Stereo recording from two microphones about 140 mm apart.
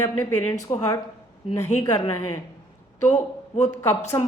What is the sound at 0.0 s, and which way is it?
A woman's voice, 15° left (ahead or behind).